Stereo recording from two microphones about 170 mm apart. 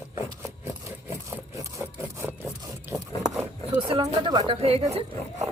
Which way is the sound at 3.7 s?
35° right (ahead or behind).